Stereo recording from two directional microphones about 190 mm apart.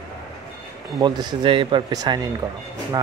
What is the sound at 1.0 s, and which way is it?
Speech, 25° right (ahead or behind).